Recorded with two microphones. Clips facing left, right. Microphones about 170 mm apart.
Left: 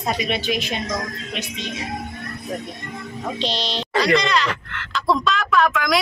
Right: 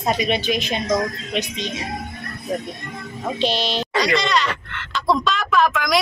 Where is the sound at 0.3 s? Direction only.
20° right (ahead or behind).